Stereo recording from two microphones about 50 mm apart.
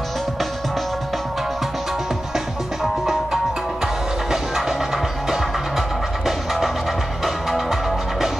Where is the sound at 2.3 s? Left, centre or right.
Centre.